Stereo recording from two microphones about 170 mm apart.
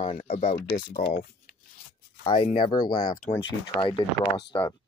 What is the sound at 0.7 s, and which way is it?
Speech, 60° left (ahead or behind).